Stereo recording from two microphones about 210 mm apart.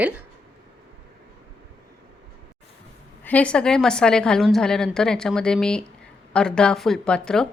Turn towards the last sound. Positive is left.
turn(degrees=5)  # may be behind; listen again after turning